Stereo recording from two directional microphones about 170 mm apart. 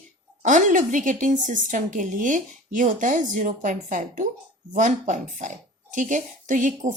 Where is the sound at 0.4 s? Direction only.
45° right (ahead or behind).